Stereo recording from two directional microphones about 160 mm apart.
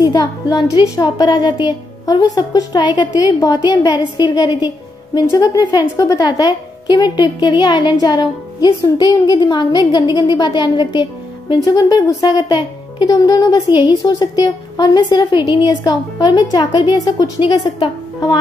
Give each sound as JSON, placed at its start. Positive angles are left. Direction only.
{"t": 0.0, "sound": "speech", "side_deg": 25}